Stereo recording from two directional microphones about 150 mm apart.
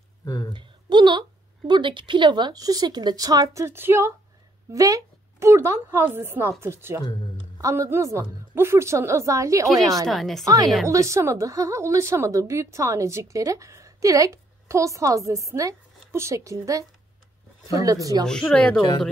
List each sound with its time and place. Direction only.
0.2 s a sound: 25° left (ahead or behind)
0.6 s a woman's voice: 30° right (ahead or behind)
7.0 s speech: 30° left (ahead or behind)
7.5 s a woman's voice: 20° right (ahead or behind)
9.7 s a woman's voice: centre (ahead or behind)
10.4 s a woman's voice: 25° right (ahead or behind)
18.2 s speech: 5° left (ahead or behind)
18.8 s speech: 30° left (ahead or behind)